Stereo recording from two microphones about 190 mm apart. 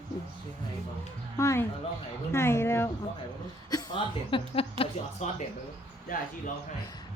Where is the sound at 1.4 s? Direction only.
15° left (ahead or behind); by 5.3 s 30° left (ahead or behind).